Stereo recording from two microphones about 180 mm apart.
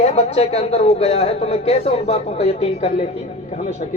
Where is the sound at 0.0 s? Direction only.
35° left (ahead or behind).